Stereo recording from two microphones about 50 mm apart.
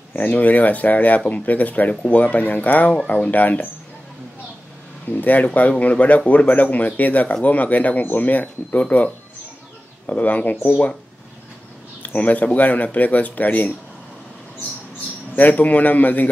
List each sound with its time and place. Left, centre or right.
0.1 s speech: left
5.1 s speech: left
12.0 s speech: left
15.3 s speech: left